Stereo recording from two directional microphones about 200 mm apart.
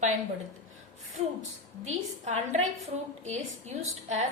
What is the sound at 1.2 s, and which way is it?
A woman's voice, 30° right (ahead or behind).